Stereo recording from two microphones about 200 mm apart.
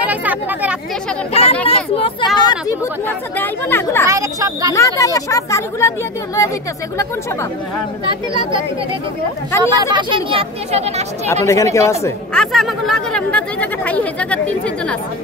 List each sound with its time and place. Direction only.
0.0 s speech: 10° right (ahead or behind)
1.3 s speech: 30° left (ahead or behind); by 4.0 s 10° left (ahead or behind)
4.1 s speech: 15° right (ahead or behind)
4.7 s speech: 15° left (ahead or behind)
8.0 s speech: 25° right (ahead or behind)
9.8 s speech: 25° right (ahead or behind)
11.4 s speech: 15° left (ahead or behind)
12.4 s speech: centre (ahead or behind)